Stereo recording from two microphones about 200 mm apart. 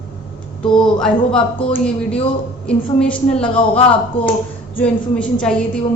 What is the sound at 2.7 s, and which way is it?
Speech, 5° left (ahead or behind).